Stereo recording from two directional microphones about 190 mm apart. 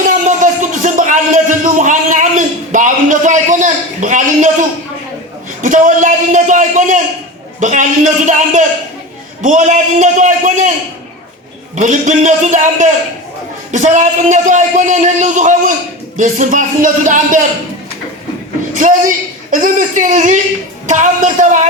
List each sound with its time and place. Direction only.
0.0 s a sound: 45° right (ahead or behind)
5.6 s a man's voice: 45° right (ahead or behind)
11.8 s a man's voice: 40° right (ahead or behind)
18.8 s a man's voice: 40° right (ahead or behind)